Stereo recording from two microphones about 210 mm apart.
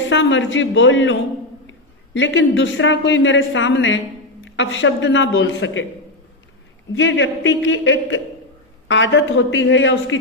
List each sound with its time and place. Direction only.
0.1 s speech: 60° left (ahead or behind)
2.1 s speech: 65° left (ahead or behind)
6.9 s speech: 60° left (ahead or behind)